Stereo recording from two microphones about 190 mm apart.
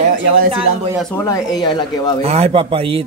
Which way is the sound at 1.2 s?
20° left (ahead or behind).